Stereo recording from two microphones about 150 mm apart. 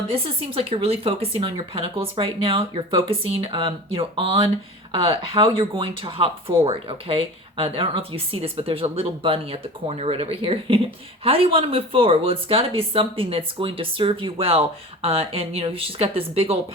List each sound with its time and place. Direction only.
0.1 s speech: 40° right (ahead or behind)